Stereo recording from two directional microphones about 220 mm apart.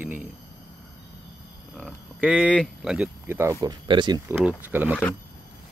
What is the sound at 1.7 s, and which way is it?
Speech, centre (ahead or behind).